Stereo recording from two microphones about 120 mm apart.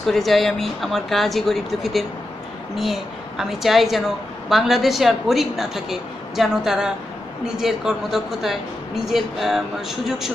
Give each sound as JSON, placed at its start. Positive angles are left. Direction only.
{"t": 0.0, "sound": "a woman's voice", "side_deg": 0}